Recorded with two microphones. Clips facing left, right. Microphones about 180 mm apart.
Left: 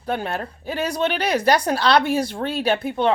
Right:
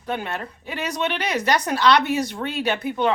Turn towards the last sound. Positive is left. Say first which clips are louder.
# left 2 dB
turn(degrees=30)  # may be behind; listen again after turning